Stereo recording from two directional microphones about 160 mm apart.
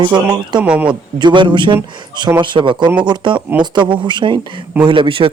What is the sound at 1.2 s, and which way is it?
A man's voice, 30° right (ahead or behind).